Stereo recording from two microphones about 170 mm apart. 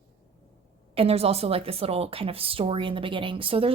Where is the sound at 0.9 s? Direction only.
35° right (ahead or behind).